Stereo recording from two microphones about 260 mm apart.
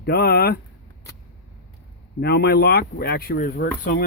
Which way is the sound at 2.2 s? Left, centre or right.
Left.